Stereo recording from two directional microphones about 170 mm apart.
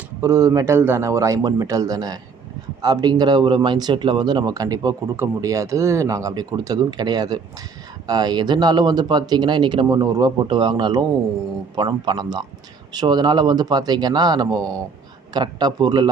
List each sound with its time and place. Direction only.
0.2 s speech: 15° right (ahead or behind)